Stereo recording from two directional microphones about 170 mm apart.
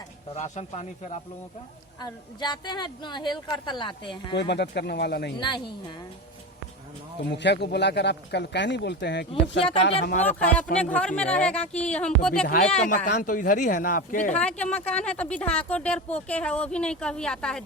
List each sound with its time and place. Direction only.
0.3 s speech: 45° left (ahead or behind)
2.0 s a woman's voice: 25° left (ahead or behind)
4.4 s speech: 90° left
5.4 s a woman's voice: 25° left (ahead or behind)
7.3 s a man's voice: 90° left
9.3 s speech: 30° left (ahead or behind)
10.2 s speech: 10° left (ahead or behind)
13.1 s speech: 55° left (ahead or behind)
14.3 s speech: 5° left (ahead or behind)